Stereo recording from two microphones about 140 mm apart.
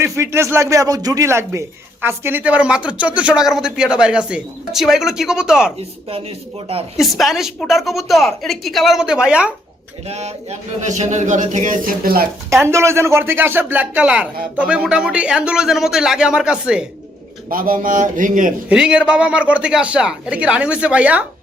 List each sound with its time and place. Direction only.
0.0 s a woman's voice: 20° right (ahead or behind)
6.9 s a woman's voice: centre (ahead or behind)
10.1 s speech: 50° right (ahead or behind); by 12.3 s 90° right
12.5 s a woman's voice: 20° right (ahead or behind)
17.5 s a man's voice: 90° right; by 18.5 s 70° right (ahead or behind)
18.7 s a woman's voice: 5° right (ahead or behind)